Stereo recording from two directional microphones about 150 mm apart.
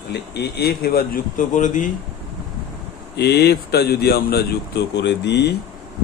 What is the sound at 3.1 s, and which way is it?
A man's voice, 90° left.